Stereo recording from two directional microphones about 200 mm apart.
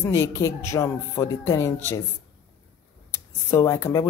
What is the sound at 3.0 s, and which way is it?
Speech, 15° left (ahead or behind).